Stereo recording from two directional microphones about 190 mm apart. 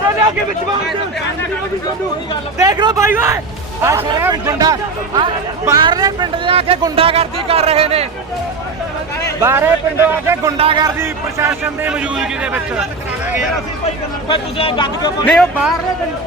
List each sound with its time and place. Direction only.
2.6 s a man's voice: 20° right (ahead or behind)
9.4 s a man's voice: 10° right (ahead or behind)
10.6 s speech: 25° right (ahead or behind)
10.9 s a man's voice: 15° right (ahead or behind)
14.3 s speech: 25° left (ahead or behind)
15.2 s speech: 5° left (ahead or behind)